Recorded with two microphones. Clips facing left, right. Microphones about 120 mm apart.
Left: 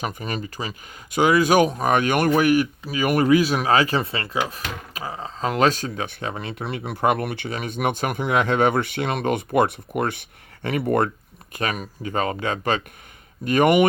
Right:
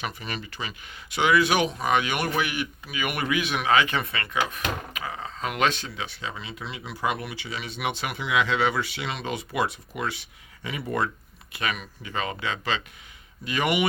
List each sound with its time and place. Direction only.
0.0 s speech: 45° left (ahead or behind)
11.5 s speech: 40° left (ahead or behind)